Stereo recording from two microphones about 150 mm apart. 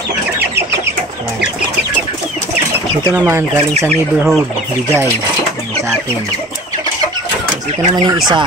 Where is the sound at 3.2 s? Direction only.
15° right (ahead or behind).